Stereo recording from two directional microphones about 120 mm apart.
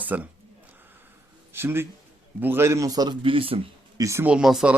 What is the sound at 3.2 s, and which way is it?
Speech, 50° right (ahead or behind).